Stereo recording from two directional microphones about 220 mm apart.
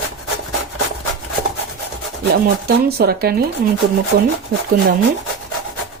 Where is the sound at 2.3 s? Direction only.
45° right (ahead or behind).